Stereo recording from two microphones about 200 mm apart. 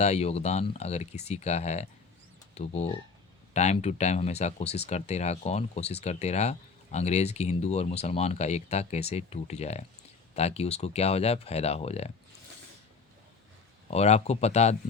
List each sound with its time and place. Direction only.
0.0 s speech: 35° left (ahead or behind)
13.9 s speech: 30° left (ahead or behind)